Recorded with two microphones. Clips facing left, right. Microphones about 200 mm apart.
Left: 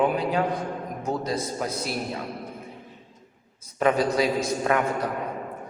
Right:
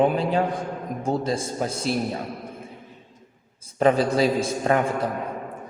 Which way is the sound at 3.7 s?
30° right (ahead or behind).